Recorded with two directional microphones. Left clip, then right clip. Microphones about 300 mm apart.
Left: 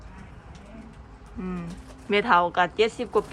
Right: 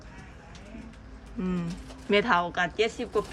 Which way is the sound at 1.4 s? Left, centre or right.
Centre.